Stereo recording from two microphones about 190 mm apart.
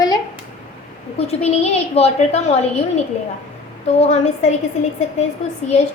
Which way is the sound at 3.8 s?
35° left (ahead or behind).